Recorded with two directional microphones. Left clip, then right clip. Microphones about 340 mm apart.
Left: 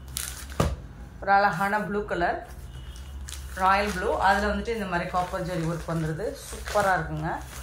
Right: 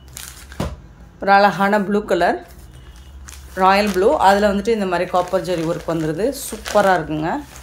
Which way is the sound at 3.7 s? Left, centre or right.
Centre.